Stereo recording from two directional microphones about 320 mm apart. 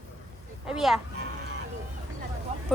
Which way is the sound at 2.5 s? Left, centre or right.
Centre.